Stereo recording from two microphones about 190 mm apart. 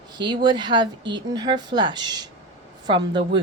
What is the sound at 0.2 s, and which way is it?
Speech, 25° right (ahead or behind).